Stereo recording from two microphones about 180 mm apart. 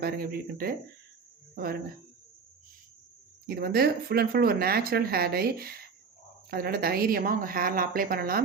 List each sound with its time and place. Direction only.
0.0 s speech: 55° right (ahead or behind)
3.4 s speech: 55° right (ahead or behind)